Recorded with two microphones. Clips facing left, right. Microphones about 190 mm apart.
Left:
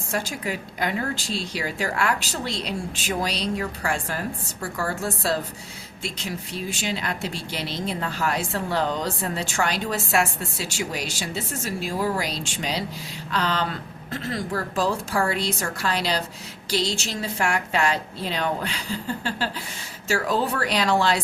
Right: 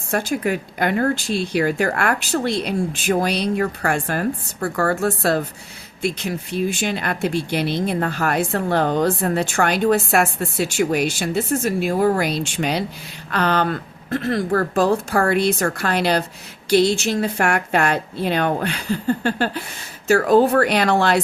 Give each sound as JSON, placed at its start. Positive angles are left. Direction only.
{"t": 0.1, "sound": "speech", "side_deg": -55}